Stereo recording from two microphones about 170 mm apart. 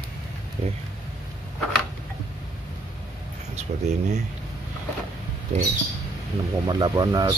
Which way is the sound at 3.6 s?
40° right (ahead or behind).